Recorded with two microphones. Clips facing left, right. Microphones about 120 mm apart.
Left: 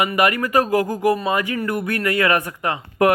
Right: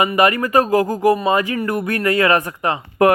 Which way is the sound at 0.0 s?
40° right (ahead or behind).